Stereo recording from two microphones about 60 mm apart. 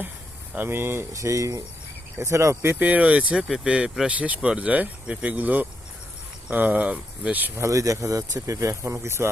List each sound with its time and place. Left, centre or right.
0.5 s speech: right
1.1 s speech: right
2.7 s speech: right
7.7 s speech: right